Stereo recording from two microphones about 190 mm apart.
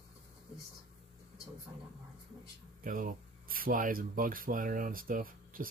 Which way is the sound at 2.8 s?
45° right (ahead or behind).